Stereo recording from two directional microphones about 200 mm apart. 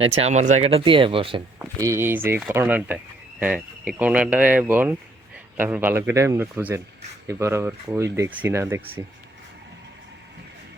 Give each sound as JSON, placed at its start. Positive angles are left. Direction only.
{"t": 0.0, "sound": "speech", "side_deg": -30}
{"t": 1.5, "sound": "speech", "side_deg": -15}